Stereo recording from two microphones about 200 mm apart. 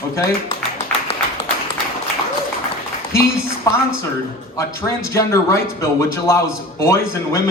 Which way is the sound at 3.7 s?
15° left (ahead or behind).